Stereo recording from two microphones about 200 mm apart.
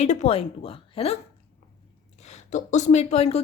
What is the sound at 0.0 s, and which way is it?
Speech, 35° left (ahead or behind).